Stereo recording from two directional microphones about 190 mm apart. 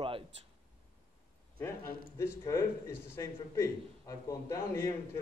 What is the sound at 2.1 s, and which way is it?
A man's voice, 15° left (ahead or behind).